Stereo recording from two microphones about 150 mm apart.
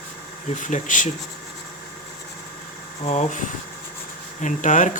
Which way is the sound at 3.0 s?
50° left (ahead or behind).